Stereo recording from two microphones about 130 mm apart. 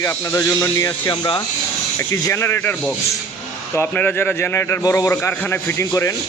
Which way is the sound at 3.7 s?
15° left (ahead or behind).